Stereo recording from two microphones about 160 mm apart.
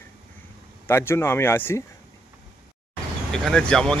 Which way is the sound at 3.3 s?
5° left (ahead or behind).